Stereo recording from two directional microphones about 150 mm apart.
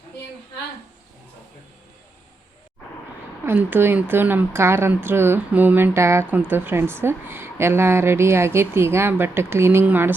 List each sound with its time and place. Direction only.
3.4 s speech: 15° right (ahead or behind)